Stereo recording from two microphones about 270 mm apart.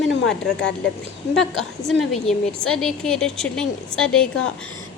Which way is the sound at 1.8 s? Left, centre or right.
Centre.